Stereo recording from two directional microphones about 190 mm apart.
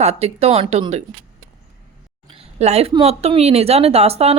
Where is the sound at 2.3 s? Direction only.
35° right (ahead or behind).